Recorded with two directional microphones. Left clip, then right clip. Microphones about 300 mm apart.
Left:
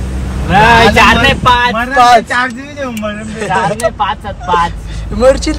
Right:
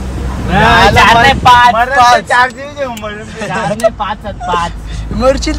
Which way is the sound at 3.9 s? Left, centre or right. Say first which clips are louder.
Left 3 dB; left.